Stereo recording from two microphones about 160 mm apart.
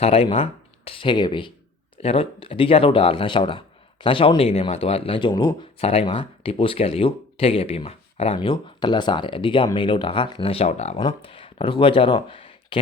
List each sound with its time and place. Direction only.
0.0 s speech: 35° left (ahead or behind)
5.8 s speech: 35° left (ahead or behind)